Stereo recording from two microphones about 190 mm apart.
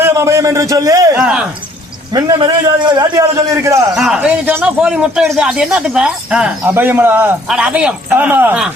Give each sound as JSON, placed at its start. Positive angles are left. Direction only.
{"t": 0.0, "sound": "a man's voice", "side_deg": -15}
{"t": 1.1, "sound": "a man's voice", "side_deg": -5}
{"t": 2.1, "sound": "a man's voice", "side_deg": -25}
{"t": 3.9, "sound": "a man's voice", "side_deg": -5}